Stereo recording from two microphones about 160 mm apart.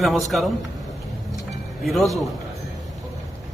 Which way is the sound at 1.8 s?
Centre (ahead or behind).